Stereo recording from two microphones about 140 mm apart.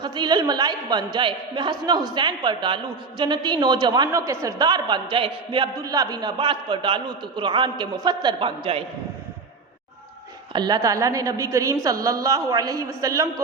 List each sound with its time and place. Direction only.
0.0 s a man's voice: 30° right (ahead or behind)
5.7 s a man's voice: 25° right (ahead or behind)
10.5 s a woman's voice: 30° right (ahead or behind)